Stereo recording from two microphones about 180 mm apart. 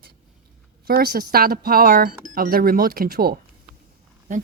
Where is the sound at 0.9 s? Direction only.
55° right (ahead or behind).